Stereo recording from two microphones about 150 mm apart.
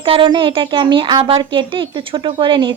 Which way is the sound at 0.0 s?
35° right (ahead or behind).